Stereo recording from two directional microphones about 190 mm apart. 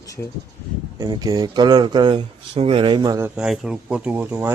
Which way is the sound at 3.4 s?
5° right (ahead or behind).